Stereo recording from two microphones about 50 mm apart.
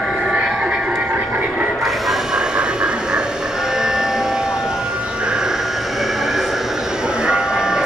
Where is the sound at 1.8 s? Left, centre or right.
Centre.